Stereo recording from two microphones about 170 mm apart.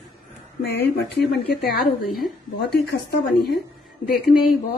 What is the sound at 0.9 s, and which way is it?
Speech, 70° left (ahead or behind).